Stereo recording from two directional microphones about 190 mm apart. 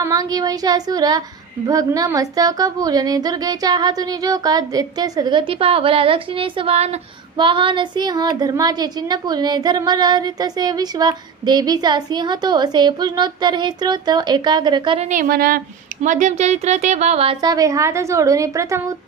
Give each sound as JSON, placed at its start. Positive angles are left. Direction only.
{"t": 0.0, "sound": "a woman's voice", "side_deg": -20}
{"t": 15.0, "sound": "speech", "side_deg": -45}